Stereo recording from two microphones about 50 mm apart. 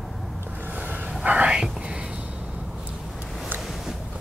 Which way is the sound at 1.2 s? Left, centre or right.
Right.